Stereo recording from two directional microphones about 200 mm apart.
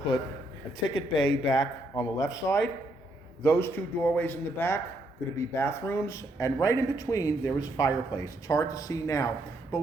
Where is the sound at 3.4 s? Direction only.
10° left (ahead or behind).